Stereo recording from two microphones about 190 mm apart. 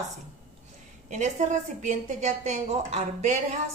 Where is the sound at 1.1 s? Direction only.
40° right (ahead or behind).